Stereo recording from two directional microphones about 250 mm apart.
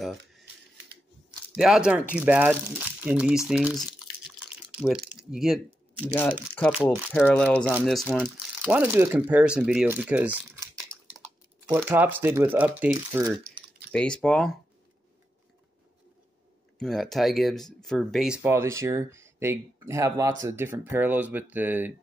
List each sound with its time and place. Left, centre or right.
1.6 s speech: centre
13.4 s typing: right
13.9 s speech: centre
16.7 s speech: centre